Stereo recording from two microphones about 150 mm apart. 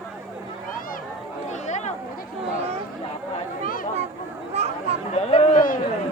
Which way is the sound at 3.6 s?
65° left (ahead or behind).